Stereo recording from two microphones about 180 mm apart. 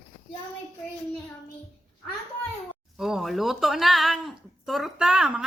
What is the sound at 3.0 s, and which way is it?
Speech, centre (ahead or behind).